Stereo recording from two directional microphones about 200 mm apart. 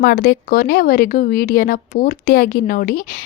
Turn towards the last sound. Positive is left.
turn(degrees=45)  # may be behind; listen again after turning